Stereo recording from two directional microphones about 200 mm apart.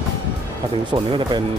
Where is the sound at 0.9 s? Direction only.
25° right (ahead or behind).